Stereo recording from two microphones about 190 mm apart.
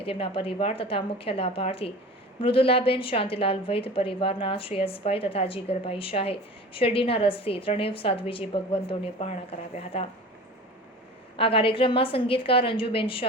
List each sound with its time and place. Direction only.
0.0 s a woman's voice: 30° left (ahead or behind)
11.3 s a woman's voice: 30° left (ahead or behind)